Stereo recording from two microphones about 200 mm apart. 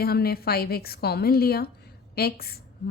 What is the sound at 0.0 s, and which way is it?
A woman's voice, 50° left (ahead or behind).